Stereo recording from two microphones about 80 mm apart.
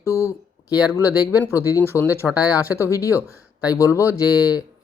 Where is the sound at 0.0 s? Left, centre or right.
Left.